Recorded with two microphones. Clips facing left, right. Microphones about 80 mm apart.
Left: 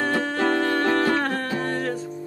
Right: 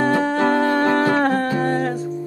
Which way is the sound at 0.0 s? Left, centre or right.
Centre.